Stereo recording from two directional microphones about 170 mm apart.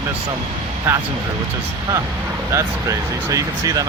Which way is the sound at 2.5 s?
20° right (ahead or behind).